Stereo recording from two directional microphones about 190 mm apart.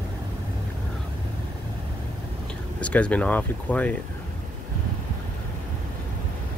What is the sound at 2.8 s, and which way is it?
Speech, 5° left (ahead or behind).